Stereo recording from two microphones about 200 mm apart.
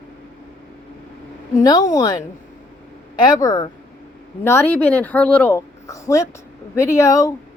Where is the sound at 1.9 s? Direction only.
20° left (ahead or behind).